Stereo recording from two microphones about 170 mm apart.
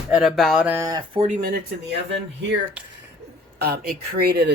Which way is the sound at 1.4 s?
65° right (ahead or behind).